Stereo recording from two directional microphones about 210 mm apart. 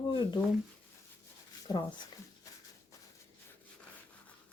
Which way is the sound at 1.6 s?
20° left (ahead or behind).